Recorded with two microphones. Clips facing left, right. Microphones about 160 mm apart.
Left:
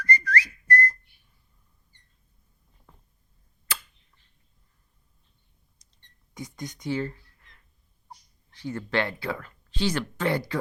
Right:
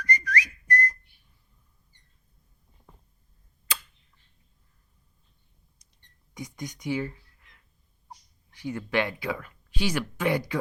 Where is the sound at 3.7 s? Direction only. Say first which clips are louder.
Even; 15° right (ahead or behind).